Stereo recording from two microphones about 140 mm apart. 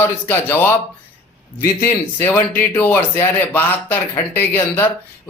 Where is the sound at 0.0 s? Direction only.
15° left (ahead or behind).